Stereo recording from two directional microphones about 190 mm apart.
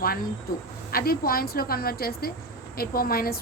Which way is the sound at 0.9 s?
50° left (ahead or behind).